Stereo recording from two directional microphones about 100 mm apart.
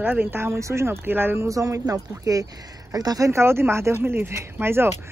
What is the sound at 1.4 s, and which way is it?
Speech, 35° right (ahead or behind).